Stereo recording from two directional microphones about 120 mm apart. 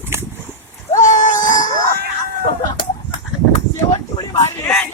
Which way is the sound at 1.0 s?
90° left.